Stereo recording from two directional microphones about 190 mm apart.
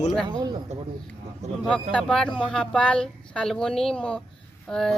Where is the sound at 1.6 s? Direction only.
5° left (ahead or behind).